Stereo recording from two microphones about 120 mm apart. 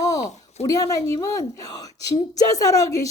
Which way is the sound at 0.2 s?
70° left (ahead or behind).